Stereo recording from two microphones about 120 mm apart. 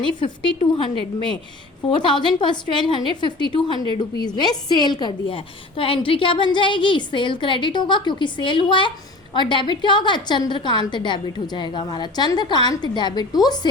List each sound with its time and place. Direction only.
0.2 s a woman's voice: 40° left (ahead or behind)
1.9 s a woman's voice: 40° left (ahead or behind)